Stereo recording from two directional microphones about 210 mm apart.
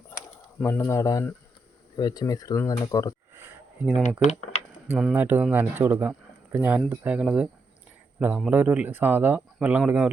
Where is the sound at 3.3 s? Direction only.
10° right (ahead or behind).